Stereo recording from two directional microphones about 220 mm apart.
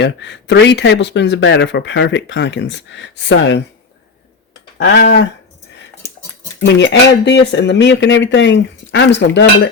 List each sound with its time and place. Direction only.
0.0 s speech: 50° left (ahead or behind)
4.8 s speech: 55° left (ahead or behind)
6.6 s speech: 55° left (ahead or behind)